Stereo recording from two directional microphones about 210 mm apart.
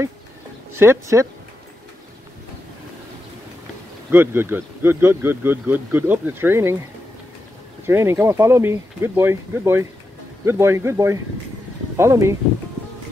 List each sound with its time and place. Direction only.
0.7 s speech: 15° right (ahead or behind)
4.1 s speech: 10° right (ahead or behind)
7.8 s speech: 10° right (ahead or behind)